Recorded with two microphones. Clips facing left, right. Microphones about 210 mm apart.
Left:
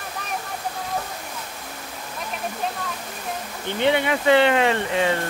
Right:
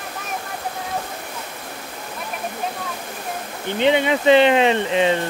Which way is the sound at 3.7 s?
20° right (ahead or behind).